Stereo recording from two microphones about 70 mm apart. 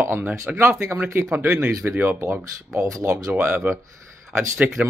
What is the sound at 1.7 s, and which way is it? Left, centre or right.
Speech, right.